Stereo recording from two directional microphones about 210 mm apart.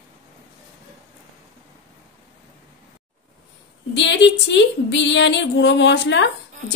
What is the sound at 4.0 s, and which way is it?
A woman's voice, 60° left (ahead or behind).